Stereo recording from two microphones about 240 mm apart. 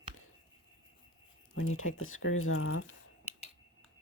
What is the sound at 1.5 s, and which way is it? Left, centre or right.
Speech, left.